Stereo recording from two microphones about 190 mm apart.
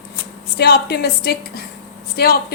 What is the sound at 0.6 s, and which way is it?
A woman's voice, 55° left (ahead or behind).